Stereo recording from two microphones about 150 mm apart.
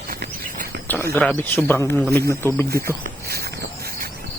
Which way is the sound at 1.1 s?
5° left (ahead or behind).